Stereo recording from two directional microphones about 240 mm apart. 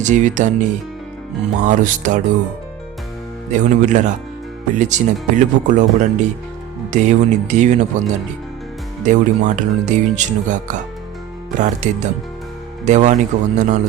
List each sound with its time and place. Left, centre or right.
0.0 s speech: right
3.6 s speech: right
9.0 s speech: right